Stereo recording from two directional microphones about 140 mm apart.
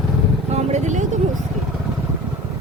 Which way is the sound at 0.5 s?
55° right (ahead or behind).